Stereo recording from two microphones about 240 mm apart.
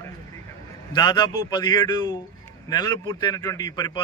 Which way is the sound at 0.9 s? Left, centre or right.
Centre.